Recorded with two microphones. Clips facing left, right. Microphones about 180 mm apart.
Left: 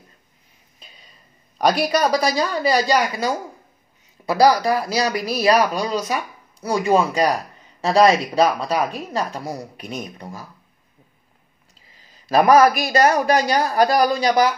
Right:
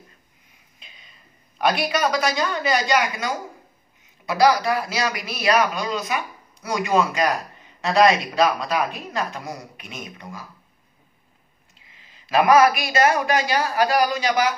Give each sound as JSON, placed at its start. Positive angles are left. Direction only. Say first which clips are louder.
{"t": 0.7, "sound": "a sound", "louder": "left 3 dB", "side_deg": 40}
{"t": 1.6, "sound": "speech", "louder": "left 3 dB", "side_deg": 40}
{"t": 11.9, "sound": "speech", "louder": "left 3 dB", "side_deg": 40}